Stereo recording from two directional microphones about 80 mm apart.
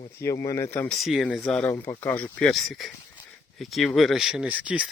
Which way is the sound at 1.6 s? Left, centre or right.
Left.